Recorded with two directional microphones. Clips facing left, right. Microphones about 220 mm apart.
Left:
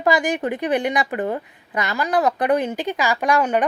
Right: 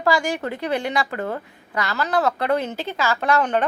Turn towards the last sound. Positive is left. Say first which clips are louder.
# left 1 dB
turn(degrees=10)  # may be behind; listen again after turning